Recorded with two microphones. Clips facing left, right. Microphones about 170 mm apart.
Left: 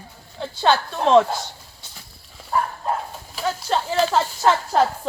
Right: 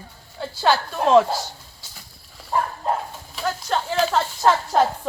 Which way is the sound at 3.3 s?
5° left (ahead or behind).